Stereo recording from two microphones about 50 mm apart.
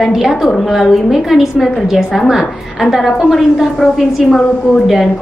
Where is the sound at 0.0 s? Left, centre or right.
Centre.